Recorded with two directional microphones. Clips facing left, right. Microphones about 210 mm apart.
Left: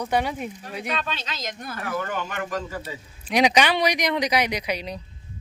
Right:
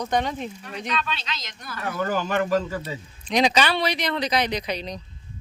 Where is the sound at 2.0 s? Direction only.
35° right (ahead or behind).